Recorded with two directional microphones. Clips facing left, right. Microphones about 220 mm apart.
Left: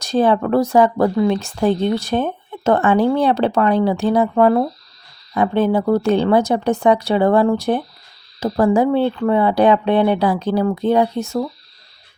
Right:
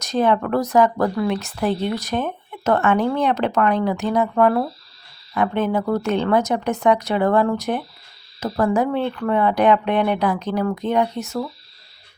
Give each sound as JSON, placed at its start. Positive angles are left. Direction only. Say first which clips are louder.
{"t": 0.0, "sound": "speech", "louder": "left 3 dB", "side_deg": 30}